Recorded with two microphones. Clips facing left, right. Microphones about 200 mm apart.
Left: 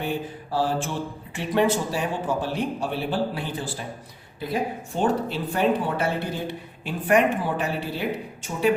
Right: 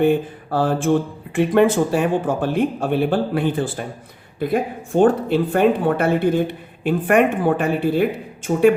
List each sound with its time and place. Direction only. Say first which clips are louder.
0.0 s speech: right 11 dB; 55° right (ahead or behind)